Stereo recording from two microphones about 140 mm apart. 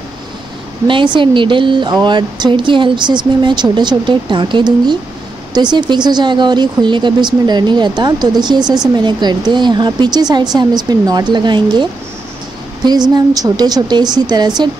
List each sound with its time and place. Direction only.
0.8 s speech: 35° right (ahead or behind)
13.1 s a woman's voice: 30° right (ahead or behind)